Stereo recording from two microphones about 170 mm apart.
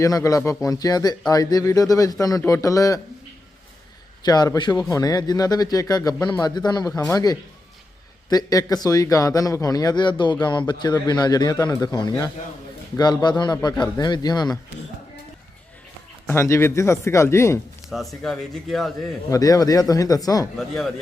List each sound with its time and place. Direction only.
0.0 s a man's voice: 20° left (ahead or behind)
4.3 s a man's voice: 25° left (ahead or behind)
16.2 s speech: 15° left (ahead or behind)
17.8 s speech: centre (ahead or behind)
19.3 s a man's voice: 20° left (ahead or behind)
20.6 s speech: centre (ahead or behind)